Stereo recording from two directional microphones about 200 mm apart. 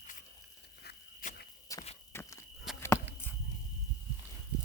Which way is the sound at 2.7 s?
15° left (ahead or behind).